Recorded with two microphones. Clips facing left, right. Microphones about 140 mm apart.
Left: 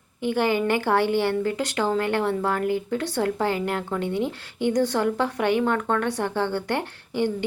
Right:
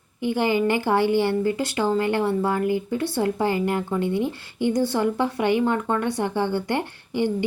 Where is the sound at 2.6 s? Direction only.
55° left (ahead or behind).